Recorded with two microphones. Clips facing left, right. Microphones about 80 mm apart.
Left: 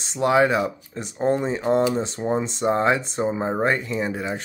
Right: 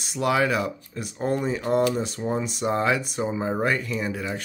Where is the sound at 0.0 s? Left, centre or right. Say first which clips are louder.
Left 4 dB; left.